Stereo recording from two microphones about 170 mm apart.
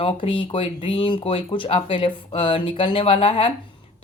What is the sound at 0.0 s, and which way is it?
Speech, 30° left (ahead or behind).